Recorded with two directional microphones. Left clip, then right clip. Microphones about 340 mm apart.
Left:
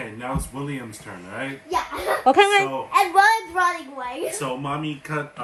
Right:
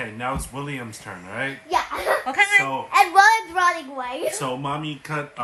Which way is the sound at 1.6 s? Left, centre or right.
Centre.